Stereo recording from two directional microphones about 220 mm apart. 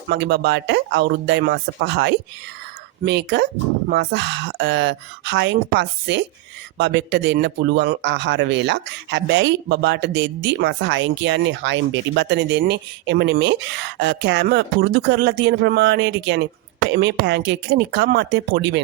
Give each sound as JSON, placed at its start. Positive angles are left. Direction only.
{"t": 0.1, "sound": "speech", "side_deg": -50}